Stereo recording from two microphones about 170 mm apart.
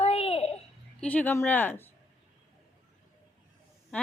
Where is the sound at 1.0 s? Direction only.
10° left (ahead or behind).